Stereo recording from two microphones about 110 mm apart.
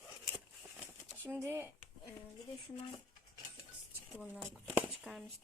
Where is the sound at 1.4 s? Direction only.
20° right (ahead or behind).